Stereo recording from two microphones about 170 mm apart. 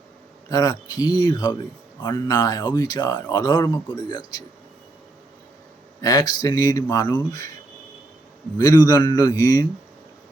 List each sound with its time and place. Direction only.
0.5 s speech: 20° left (ahead or behind)
6.0 s speech: 20° left (ahead or behind)
8.5 s speech: 20° left (ahead or behind)